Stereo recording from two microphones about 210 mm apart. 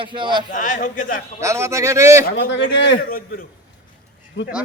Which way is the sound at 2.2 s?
55° left (ahead or behind).